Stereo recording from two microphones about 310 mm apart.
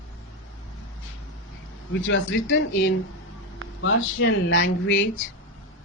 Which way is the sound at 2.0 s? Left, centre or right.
Left.